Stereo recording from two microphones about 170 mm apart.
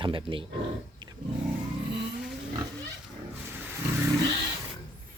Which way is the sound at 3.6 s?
15° right (ahead or behind).